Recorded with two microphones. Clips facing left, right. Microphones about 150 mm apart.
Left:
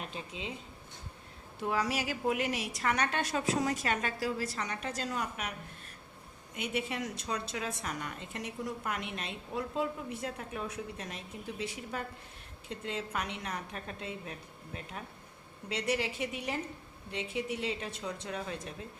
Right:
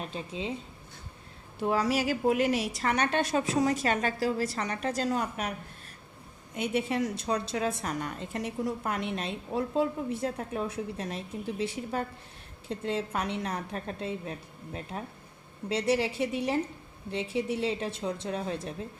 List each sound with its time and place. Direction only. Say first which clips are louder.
0.1 s a woman's voice: right 6 dB; 30° right (ahead or behind)
1.6 s a woman's voice: right 6 dB; 35° right (ahead or behind)
6.6 s a woman's voice: right 7 dB; 35° right (ahead or behind)